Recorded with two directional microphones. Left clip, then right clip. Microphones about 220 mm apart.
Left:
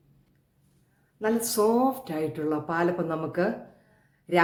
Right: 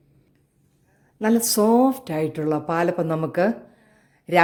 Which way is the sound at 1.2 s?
40° right (ahead or behind).